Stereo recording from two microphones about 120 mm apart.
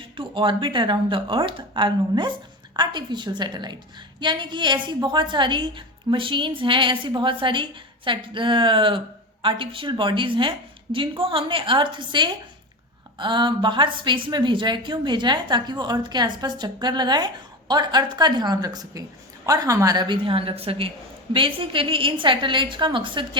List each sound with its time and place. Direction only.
0.2 s a woman's voice: 45° right (ahead or behind)